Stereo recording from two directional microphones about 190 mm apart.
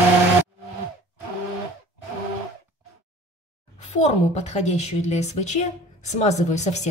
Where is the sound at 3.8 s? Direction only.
35° left (ahead or behind).